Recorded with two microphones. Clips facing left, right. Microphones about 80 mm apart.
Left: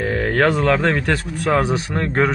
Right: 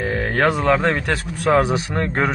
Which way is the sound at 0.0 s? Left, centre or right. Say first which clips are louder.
Left 1 dB; centre.